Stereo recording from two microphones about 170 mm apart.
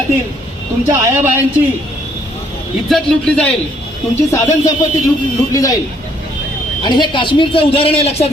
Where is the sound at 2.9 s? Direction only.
5° left (ahead or behind).